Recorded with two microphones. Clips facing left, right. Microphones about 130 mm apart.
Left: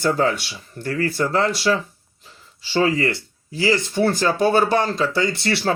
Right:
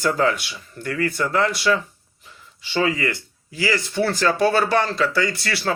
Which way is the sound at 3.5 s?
25° left (ahead or behind).